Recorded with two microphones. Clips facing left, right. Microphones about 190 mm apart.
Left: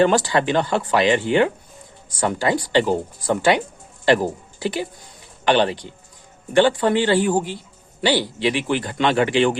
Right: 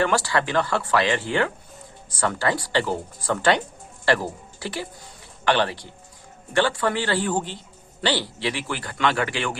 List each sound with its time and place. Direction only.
0.0 s speech: 20° left (ahead or behind)